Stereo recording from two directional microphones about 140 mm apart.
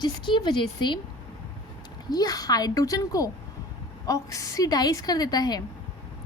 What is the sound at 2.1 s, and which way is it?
A woman's voice, 25° left (ahead or behind).